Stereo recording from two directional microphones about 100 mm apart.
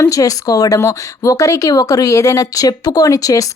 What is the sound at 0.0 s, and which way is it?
Speech, 35° left (ahead or behind).